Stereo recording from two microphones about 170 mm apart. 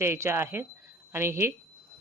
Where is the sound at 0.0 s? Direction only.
15° right (ahead or behind).